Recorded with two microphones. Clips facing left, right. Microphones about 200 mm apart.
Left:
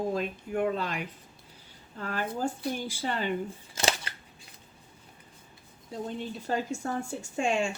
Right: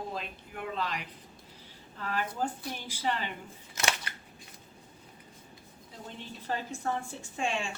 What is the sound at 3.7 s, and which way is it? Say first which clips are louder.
Scissors: left 3 dB; 30° left (ahead or behind).